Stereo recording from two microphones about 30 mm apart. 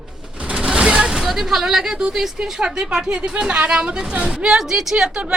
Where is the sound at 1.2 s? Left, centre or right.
Centre.